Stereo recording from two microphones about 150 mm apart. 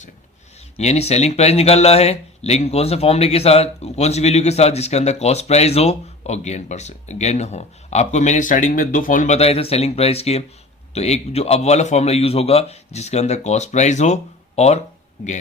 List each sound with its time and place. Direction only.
0.8 s speech: 45° left (ahead or behind)